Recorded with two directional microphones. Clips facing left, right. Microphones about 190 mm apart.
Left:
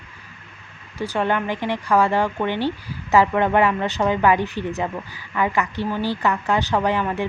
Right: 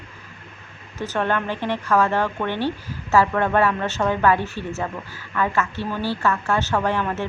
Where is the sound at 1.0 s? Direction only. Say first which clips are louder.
Left 1 dB; 15° left (ahead or behind).